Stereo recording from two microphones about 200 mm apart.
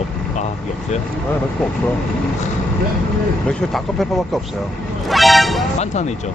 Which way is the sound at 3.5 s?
Centre (ahead or behind).